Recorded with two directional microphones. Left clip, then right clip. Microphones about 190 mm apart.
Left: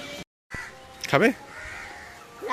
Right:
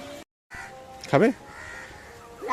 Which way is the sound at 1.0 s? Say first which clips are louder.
Even; 5° right (ahead or behind).